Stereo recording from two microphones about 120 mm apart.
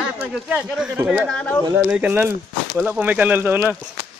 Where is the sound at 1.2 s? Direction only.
10° left (ahead or behind).